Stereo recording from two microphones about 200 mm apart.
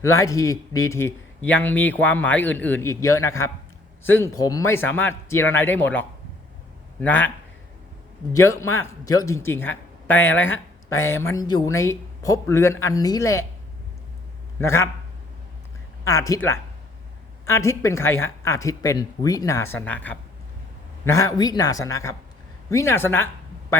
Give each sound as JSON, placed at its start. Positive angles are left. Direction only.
{"t": 0.0, "sound": "speech", "side_deg": 15}
{"t": 8.3, "sound": "speech", "side_deg": 15}
{"t": 14.6, "sound": "speech", "side_deg": 15}
{"t": 16.0, "sound": "speech", "side_deg": 15}